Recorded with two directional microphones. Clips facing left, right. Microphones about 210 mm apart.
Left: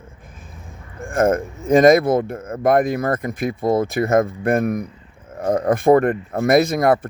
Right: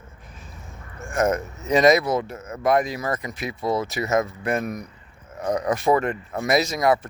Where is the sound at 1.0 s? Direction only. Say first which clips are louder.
Left 5 dB; 50° left (ahead or behind).